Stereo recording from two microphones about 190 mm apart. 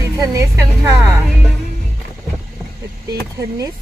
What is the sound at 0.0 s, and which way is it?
Music, 15° right (ahead or behind).